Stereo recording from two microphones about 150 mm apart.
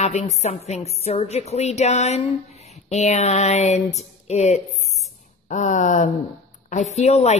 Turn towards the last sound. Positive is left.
turn(degrees=45)  # may be behind; listen again after turning